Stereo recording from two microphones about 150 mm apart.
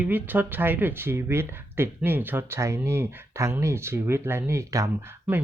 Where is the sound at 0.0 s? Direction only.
10° right (ahead or behind).